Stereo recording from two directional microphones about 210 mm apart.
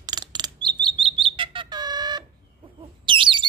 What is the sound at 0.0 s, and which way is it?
Chirp, 20° right (ahead or behind).